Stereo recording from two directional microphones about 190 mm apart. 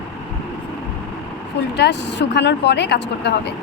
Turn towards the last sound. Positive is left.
turn(degrees=60)  # may be behind; listen again after turning